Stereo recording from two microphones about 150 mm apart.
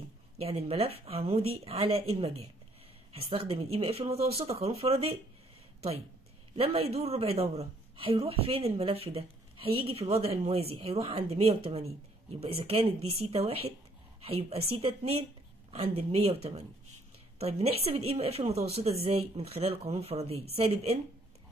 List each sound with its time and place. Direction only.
0.4 s a man's voice: 40° right (ahead or behind)
6.5 s a man's voice: 40° right (ahead or behind)
17.4 s speech: 45° right (ahead or behind)